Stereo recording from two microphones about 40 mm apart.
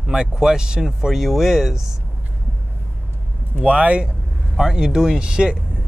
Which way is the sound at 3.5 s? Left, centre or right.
Right.